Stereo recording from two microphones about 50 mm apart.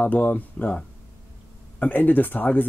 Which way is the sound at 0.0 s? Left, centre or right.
Left.